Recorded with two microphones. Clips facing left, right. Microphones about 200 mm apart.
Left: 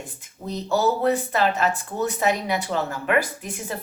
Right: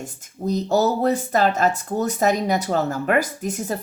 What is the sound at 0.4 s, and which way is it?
Speech, 40° right (ahead or behind).